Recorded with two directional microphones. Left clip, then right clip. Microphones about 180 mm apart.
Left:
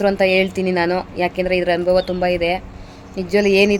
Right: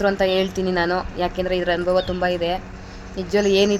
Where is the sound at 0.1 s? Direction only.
35° left (ahead or behind).